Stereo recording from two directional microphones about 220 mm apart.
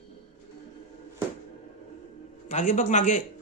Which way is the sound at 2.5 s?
35° left (ahead or behind).